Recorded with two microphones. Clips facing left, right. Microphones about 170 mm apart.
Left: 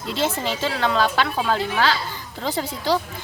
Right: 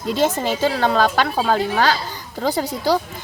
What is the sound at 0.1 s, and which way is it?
A woman's voice, 45° right (ahead or behind).